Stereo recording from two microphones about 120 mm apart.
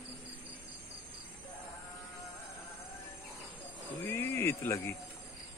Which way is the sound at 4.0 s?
25° left (ahead or behind).